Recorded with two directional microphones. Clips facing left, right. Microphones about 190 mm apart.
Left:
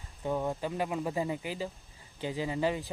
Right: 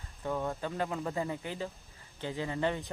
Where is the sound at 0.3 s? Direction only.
15° left (ahead or behind).